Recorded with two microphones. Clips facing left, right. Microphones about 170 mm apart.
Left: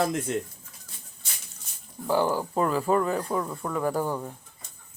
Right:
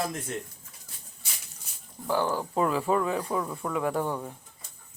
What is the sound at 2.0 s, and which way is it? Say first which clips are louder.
Speech: left 3 dB; 10° left (ahead or behind).